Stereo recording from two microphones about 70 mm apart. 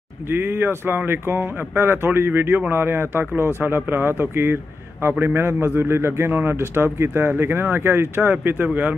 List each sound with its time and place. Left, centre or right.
0.3 s a man's voice: right